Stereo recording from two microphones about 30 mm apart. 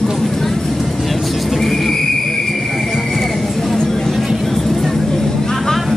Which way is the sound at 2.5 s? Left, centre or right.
Centre.